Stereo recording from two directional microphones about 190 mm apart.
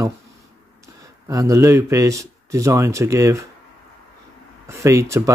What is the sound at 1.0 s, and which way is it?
Speech, 15° right (ahead or behind).